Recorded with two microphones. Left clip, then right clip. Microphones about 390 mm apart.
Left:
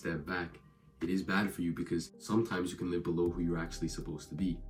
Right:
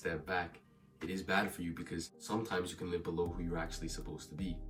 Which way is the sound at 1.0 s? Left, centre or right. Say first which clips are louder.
Left 6 dB; centre.